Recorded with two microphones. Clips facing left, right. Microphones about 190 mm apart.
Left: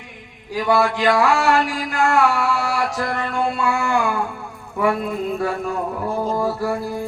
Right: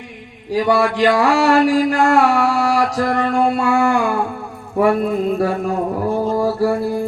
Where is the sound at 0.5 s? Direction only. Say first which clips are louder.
Right 3 dB; 35° right (ahead or behind).